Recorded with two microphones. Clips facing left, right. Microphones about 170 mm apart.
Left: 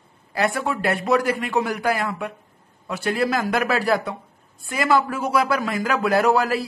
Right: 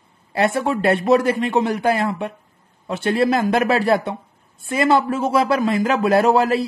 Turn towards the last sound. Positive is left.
turn(degrees=-25)  # may be behind; listen again after turning